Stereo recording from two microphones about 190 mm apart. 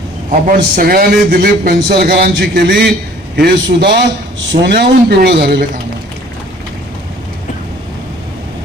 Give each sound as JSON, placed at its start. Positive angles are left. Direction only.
{"t": 0.3, "sound": "a man's voice", "side_deg": -45}